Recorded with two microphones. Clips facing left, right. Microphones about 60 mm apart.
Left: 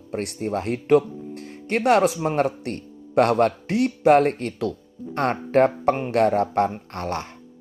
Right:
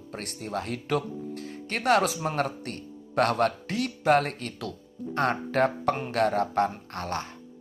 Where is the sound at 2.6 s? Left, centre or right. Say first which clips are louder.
Left 6 dB; left.